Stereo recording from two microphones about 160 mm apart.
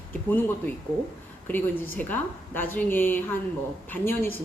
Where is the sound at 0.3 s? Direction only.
10° left (ahead or behind).